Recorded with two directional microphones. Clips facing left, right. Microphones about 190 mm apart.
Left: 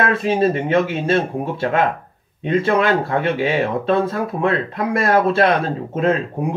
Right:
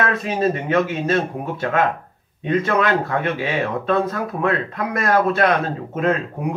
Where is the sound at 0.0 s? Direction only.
30° left (ahead or behind).